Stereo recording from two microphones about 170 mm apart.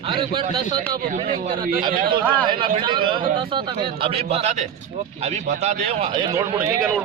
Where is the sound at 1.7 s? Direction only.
55° right (ahead or behind).